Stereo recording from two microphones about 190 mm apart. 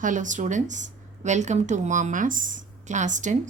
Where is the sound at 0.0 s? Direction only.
40° right (ahead or behind).